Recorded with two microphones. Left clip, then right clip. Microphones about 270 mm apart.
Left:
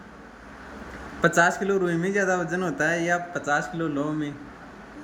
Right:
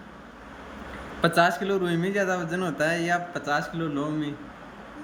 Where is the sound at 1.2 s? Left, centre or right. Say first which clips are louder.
Left 1 dB; centre.